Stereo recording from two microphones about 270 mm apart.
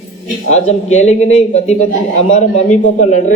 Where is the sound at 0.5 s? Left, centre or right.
Left.